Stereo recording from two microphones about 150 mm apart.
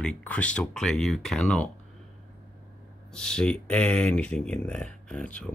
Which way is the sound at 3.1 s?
5° left (ahead or behind).